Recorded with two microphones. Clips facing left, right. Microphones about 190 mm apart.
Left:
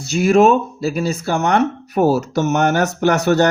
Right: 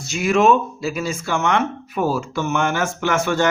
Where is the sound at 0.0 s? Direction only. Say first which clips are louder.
Left 4 dB; 35° left (ahead or behind).